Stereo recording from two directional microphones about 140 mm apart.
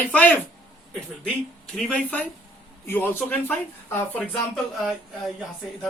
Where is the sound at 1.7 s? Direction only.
10° left (ahead or behind).